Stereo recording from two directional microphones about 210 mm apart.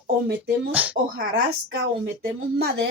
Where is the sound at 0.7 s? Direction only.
5° right (ahead or behind).